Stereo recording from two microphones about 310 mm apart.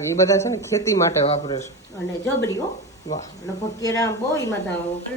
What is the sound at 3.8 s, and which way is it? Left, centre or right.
Speech, centre.